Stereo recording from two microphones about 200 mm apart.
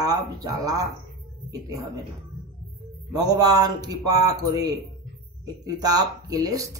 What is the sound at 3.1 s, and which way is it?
Speech, 20° right (ahead or behind).